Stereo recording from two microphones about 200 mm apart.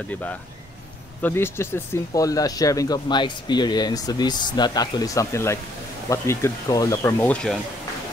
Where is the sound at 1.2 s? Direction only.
10° left (ahead or behind).